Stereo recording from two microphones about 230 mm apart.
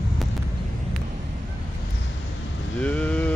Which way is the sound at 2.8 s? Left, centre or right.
Centre.